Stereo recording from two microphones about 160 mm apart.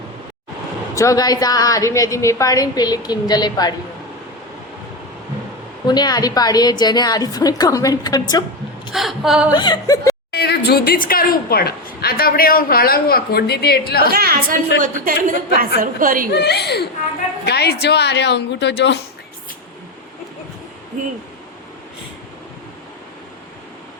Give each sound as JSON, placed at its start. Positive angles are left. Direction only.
{"t": 0.9, "sound": "a woman's voice", "side_deg": 20}
{"t": 5.8, "sound": "a woman's voice", "side_deg": 25}
{"t": 8.9, "sound": "a woman's voice", "side_deg": 0}
{"t": 9.6, "sound": "a woman's voice", "side_deg": 25}
{"t": 10.3, "sound": "a sound", "side_deg": 85}
{"t": 10.7, "sound": "a woman's voice", "side_deg": 75}
{"t": 14.1, "sound": "a woman's voice", "side_deg": -70}
{"t": 14.8, "sound": "a woman's voice", "side_deg": -55}
{"t": 16.3, "sound": "a woman's voice", "side_deg": 90}